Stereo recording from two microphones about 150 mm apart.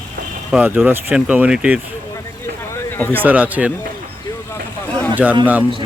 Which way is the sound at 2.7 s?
15° left (ahead or behind).